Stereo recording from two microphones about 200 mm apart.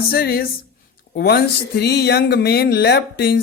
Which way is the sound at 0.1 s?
50° left (ahead or behind).